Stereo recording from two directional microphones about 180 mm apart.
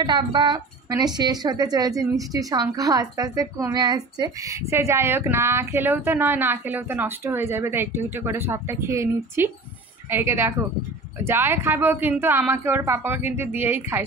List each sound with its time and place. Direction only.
0.0 s a woman's voice: 25° right (ahead or behind)